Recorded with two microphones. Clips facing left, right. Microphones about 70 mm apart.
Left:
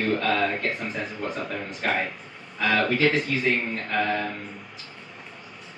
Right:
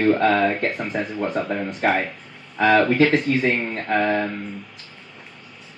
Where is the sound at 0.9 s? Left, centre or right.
Right.